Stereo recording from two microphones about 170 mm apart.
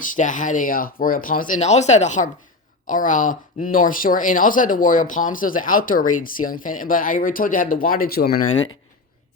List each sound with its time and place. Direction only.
0.0 s speech: 50° left (ahead or behind)